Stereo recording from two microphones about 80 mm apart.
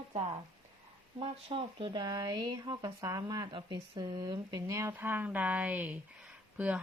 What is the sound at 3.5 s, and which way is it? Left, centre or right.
Speech, right.